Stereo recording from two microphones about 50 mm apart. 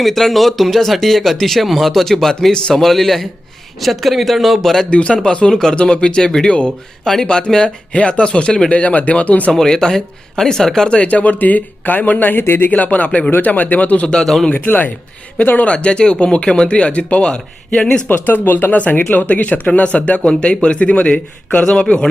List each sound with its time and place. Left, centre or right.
0.0 s speech: centre
4.9 s speech: left
8.7 s speech: left
9.5 s speech: centre
10.8 s speech: left
12.7 s speech: left
14.1 s speech: centre
14.5 s speech: left
15.6 s speech: left
18.1 s speech: left